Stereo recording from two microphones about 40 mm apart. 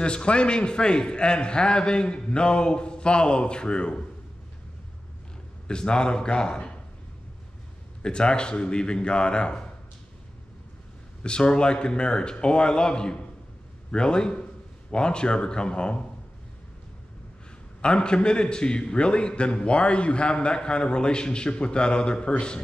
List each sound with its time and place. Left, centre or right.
0.0 s a man's voice: left
5.7 s a man's voice: left
8.0 s a man's voice: left
11.2 s a man's voice: left
17.8 s a man's voice: left